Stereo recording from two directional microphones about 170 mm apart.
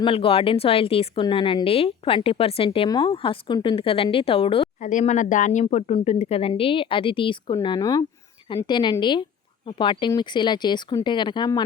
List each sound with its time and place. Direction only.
0.0 s a woman's voice: 30° left (ahead or behind)
4.8 s a woman's voice: 45° left (ahead or behind); by 11.6 s 25° left (ahead or behind)